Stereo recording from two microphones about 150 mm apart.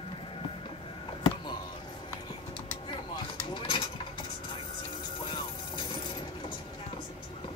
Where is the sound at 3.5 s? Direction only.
30° left (ahead or behind).